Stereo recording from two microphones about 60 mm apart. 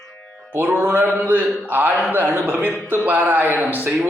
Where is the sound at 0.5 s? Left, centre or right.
Right.